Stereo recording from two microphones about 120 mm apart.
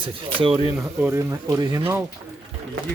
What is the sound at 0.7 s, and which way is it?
Speech, 15° right (ahead or behind).